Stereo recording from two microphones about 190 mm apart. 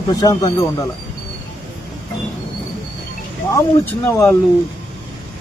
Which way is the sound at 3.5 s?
15° left (ahead or behind).